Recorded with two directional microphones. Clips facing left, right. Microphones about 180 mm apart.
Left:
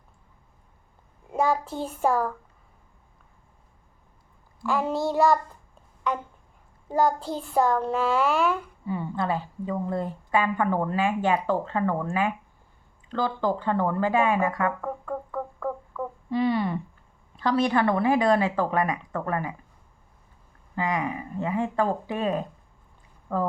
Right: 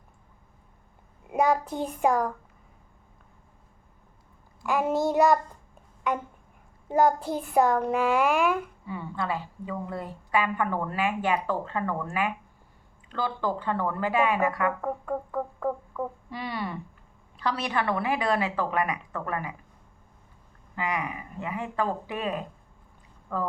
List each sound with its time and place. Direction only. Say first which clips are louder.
1.3 s a child's voice: right 1 dB; 20° right (ahead or behind)
4.6 s a child's voice: right 1 dB; 15° right (ahead or behind)
6.8 s a child's voice: right 1 dB; 20° right (ahead or behind)
8.9 s a woman's voice: left 5 dB; 30° left (ahead or behind)
14.8 s music: right 1 dB; 25° right (ahead or behind)
16.4 s a woman's voice: left 9 dB; 25° left (ahead or behind)
20.7 s a woman's voice: left 4 dB; 25° left (ahead or behind)